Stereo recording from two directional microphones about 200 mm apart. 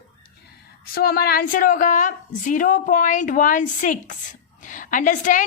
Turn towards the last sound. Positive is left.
turn(degrees=40)  # may be behind; listen again after turning